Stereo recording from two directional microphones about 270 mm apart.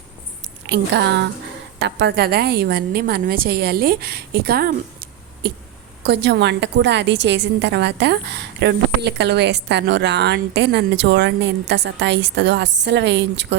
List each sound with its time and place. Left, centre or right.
0.7 s a woman's voice: right